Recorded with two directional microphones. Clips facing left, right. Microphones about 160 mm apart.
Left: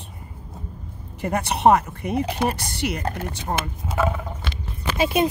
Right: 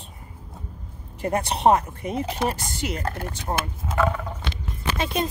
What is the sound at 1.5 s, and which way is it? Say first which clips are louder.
Speech: left 3 dB; 65° left (ahead or behind).